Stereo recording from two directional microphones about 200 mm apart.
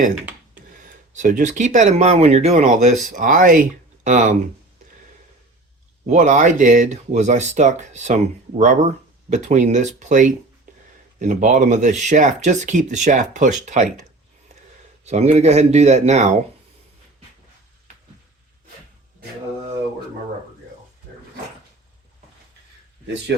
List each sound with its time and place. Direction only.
1.1 s speech: 40° right (ahead or behind)
6.1 s speech: 35° right (ahead or behind)
15.0 s speech: 35° right (ahead or behind)